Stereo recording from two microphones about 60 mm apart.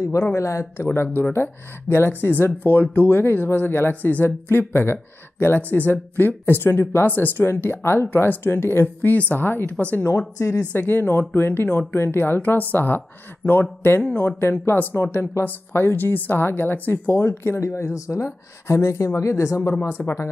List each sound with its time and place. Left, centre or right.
0.3 s speech: left
0.9 s speech: left